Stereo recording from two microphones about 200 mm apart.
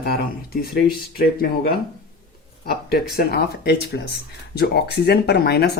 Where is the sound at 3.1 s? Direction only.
50° left (ahead or behind).